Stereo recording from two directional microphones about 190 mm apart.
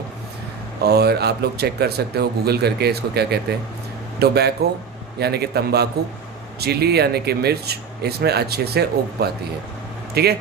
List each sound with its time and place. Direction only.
0.8 s speech: 55° right (ahead or behind)